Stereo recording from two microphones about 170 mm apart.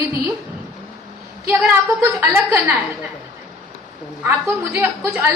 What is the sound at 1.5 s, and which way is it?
A woman's voice, 10° right (ahead or behind).